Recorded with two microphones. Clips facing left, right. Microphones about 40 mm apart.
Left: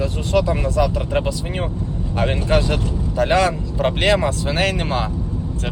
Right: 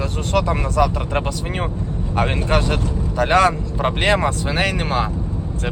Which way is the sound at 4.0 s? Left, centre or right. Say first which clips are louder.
Even; right.